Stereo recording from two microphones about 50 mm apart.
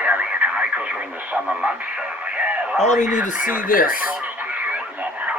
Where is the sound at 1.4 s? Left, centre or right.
Right.